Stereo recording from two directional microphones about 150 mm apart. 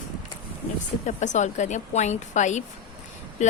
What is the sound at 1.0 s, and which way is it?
A woman's voice, 55° left (ahead or behind).